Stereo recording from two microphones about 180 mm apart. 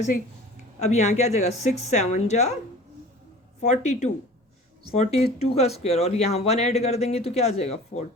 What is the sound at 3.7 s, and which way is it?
Speech, 40° left (ahead or behind).